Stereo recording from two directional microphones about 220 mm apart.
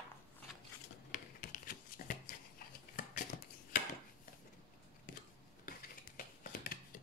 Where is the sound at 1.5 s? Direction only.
40° left (ahead or behind).